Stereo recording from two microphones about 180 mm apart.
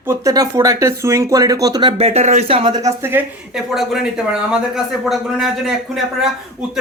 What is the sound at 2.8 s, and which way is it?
A woman's voice, 15° right (ahead or behind).